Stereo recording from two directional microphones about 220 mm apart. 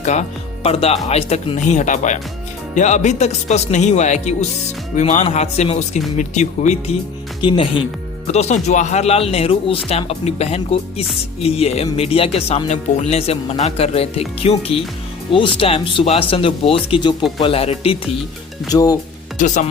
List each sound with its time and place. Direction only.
0.0 s speech: 30° left (ahead or behind)
19.4 s speech: 35° left (ahead or behind)